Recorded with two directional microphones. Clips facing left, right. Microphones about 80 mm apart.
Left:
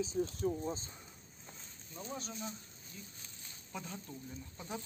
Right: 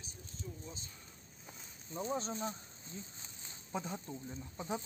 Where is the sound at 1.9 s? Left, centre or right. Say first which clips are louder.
Right 7 dB; right.